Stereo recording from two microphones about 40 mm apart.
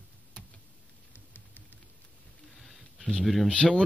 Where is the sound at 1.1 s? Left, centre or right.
Left.